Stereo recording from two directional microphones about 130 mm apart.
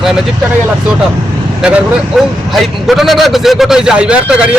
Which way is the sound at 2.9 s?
Centre (ahead or behind).